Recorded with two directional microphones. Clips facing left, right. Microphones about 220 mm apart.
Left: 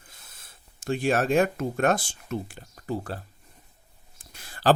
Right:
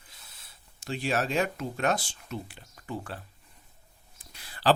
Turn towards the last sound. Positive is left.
turn(degrees=45)  # may be behind; listen again after turning